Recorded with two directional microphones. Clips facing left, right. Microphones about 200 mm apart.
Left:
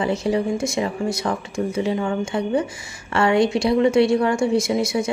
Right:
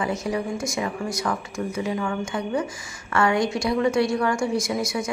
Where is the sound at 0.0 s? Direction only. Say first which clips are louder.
Left 5 dB; 30° left (ahead or behind).